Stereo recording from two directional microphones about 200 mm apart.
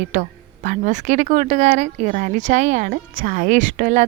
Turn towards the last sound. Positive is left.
turn(degrees=-40)  # may be behind; listen again after turning